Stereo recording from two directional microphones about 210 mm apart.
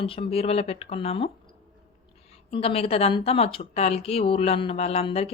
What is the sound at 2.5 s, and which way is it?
A woman's voice, 25° left (ahead or behind).